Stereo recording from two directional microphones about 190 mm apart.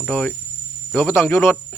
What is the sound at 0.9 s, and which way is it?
Insect, 15° left (ahead or behind).